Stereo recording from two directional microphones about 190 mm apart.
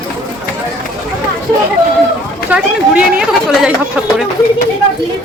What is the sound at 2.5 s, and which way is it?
Speech, 5° right (ahead or behind).